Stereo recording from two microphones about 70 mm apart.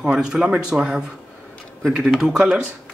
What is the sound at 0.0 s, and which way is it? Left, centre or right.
Speech, centre.